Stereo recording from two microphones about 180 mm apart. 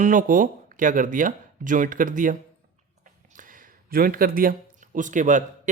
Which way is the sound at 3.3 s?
50° right (ahead or behind).